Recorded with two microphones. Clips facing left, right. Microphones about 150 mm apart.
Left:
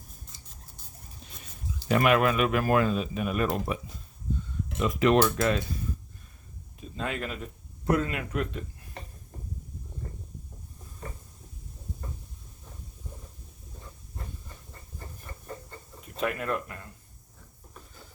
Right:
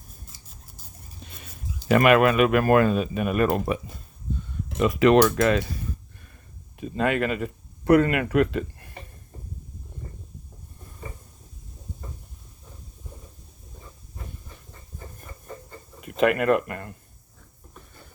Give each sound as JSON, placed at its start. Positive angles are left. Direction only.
{"t": 1.2, "sound": "a sound", "side_deg": -65}
{"t": 1.9, "sound": "speech", "side_deg": -70}
{"t": 4.8, "sound": "speech", "side_deg": -75}
{"t": 6.7, "sound": "speech", "side_deg": -65}
{"t": 16.0, "sound": "speech", "side_deg": -75}